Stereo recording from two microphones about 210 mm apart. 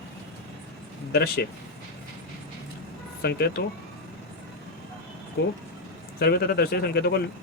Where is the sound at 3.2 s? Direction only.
50° left (ahead or behind).